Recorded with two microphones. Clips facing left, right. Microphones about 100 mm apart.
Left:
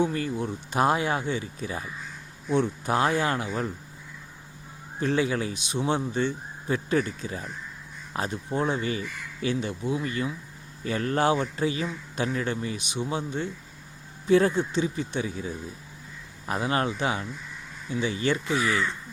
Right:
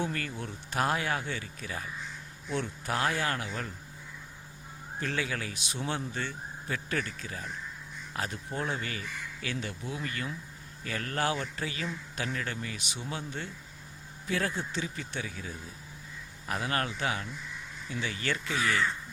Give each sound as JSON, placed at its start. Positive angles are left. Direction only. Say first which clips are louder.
{"t": 0.0, "sound": "speech", "louder": "left 8 dB", "side_deg": 20}
{"t": 4.9, "sound": "speech", "louder": "left 8 dB", "side_deg": 20}